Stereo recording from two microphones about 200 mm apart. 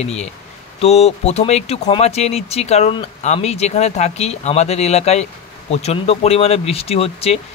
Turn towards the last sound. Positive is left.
turn(degrees=30)  # may be behind; listen again after turning